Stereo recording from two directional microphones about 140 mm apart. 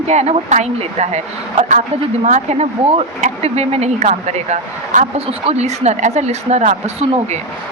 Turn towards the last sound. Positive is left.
turn(degrees=-55)  # may be behind; listen again after turning